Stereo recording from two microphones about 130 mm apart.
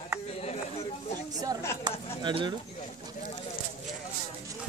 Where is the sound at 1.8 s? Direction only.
35° right (ahead or behind).